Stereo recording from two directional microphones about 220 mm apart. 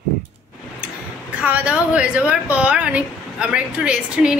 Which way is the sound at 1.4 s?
5° right (ahead or behind).